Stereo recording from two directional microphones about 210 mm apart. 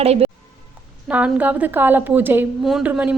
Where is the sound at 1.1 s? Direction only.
5° right (ahead or behind).